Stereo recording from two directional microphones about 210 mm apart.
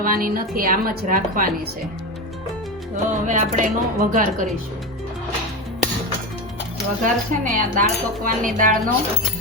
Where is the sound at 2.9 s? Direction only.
35° right (ahead or behind).